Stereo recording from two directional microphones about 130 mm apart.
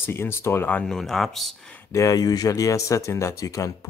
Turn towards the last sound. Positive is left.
turn(degrees=25)  # may be behind; listen again after turning